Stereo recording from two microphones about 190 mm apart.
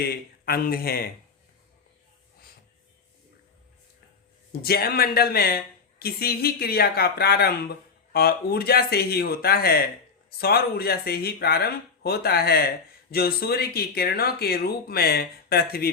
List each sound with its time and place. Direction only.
0.0 s speech: 55° left (ahead or behind)
4.6 s speech: 55° left (ahead or behind)